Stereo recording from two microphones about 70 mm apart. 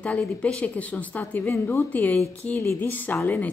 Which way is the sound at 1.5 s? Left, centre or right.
Left.